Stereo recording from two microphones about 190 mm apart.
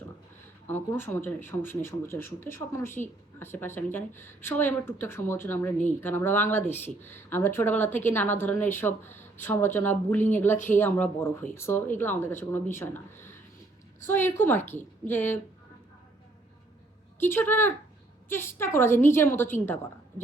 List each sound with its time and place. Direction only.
0.7 s speech: 10° left (ahead or behind)
17.2 s speech: 10° left (ahead or behind)